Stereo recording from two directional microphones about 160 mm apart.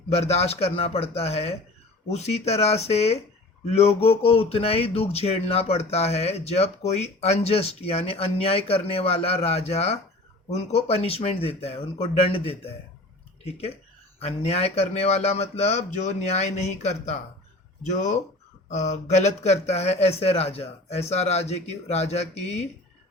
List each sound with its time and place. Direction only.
0.3 s a man's voice: 40° left (ahead or behind)